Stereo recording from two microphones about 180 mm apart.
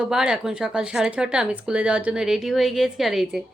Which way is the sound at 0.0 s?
5° right (ahead or behind).